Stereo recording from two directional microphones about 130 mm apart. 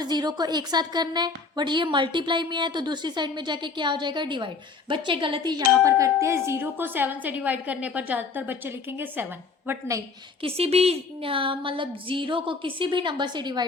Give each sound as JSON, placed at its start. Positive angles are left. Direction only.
{"t": 0.0, "sound": "a woman's voice", "side_deg": -35}
{"t": 10.4, "sound": "a woman's voice", "side_deg": -50}